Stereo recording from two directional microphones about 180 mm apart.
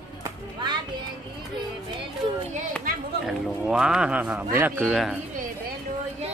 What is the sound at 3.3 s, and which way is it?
Speech, 5° right (ahead or behind).